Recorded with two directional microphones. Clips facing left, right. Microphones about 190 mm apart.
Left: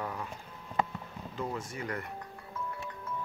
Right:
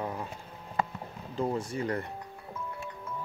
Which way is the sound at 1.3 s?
30° right (ahead or behind).